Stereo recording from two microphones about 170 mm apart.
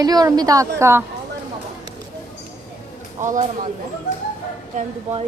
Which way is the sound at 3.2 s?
45° right (ahead or behind).